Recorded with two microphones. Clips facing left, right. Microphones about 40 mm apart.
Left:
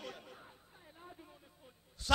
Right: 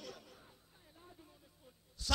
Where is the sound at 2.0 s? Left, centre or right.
Left.